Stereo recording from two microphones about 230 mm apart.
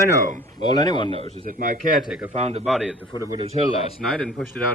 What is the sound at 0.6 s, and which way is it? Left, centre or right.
Speech, centre.